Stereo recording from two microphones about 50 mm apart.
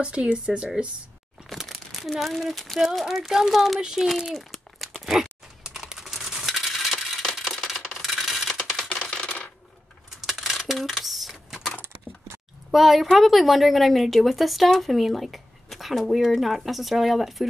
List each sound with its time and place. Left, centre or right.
0.0 s speech: right
1.5 s crumpling: centre
2.1 s a woman's voice: centre
4.3 s crumpling: centre
7.4 s a sound: centre
8.0 s coin: centre
8.8 s coin: left
10.2 s a sound: centre
11.8 s door: right
12.7 s a woman's voice: centre